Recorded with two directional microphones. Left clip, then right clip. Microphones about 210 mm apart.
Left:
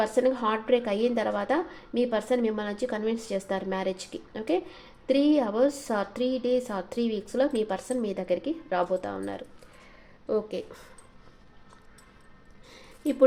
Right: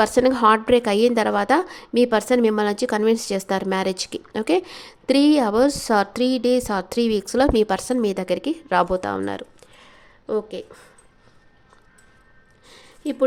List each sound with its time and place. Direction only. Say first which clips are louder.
0.0 s a woman's voice: right 8 dB; 40° right (ahead or behind)
10.2 s a woman's voice: right 3 dB; 20° right (ahead or behind)
12.6 s a sound: right 2 dB; 15° right (ahead or behind)